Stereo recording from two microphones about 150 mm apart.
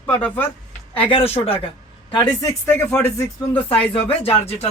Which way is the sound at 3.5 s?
35° left (ahead or behind).